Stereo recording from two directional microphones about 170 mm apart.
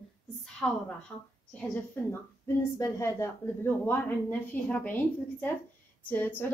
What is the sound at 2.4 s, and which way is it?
A woman's voice, 15° left (ahead or behind).